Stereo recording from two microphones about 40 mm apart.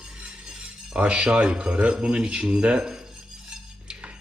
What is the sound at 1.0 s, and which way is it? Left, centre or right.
Speech, right.